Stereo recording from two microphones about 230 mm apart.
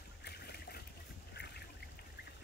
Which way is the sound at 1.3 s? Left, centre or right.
Left.